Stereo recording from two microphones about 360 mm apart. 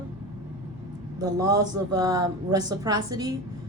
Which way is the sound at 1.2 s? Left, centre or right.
Centre.